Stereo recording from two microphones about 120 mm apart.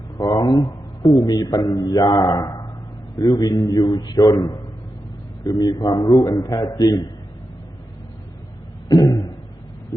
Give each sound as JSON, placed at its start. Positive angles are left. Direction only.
{"t": 0.2, "sound": "a man's voice", "side_deg": 30}
{"t": 8.9, "sound": "throat clearing", "side_deg": 30}